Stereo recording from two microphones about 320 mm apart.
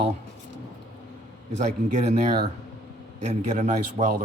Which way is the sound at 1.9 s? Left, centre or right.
Right.